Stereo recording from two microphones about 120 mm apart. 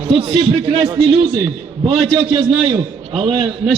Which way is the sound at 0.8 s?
40° right (ahead or behind).